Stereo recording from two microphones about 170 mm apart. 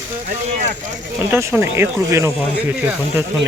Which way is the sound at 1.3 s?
15° right (ahead or behind).